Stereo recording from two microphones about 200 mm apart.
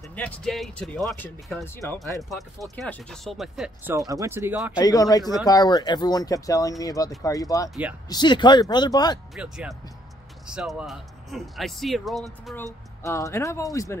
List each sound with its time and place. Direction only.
0.1 s speech: 5° left (ahead or behind)
2.2 s speech: centre (ahead or behind)
3.9 s speech: 15° right (ahead or behind)
4.7 s speech: 20° left (ahead or behind)
9.3 s speech: 5° right (ahead or behind)
13.0 s speech: 15° left (ahead or behind)